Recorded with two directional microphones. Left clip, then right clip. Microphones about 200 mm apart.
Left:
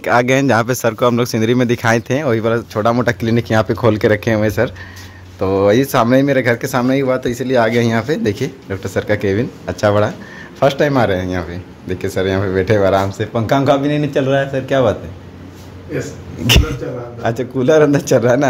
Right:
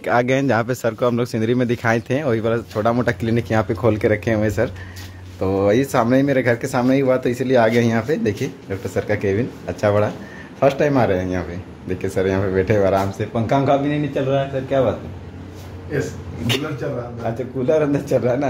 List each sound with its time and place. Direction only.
0.0 s speech: 15° left (ahead or behind); by 14.9 s 35° left (ahead or behind)
17.2 s a man's voice: 35° left (ahead or behind)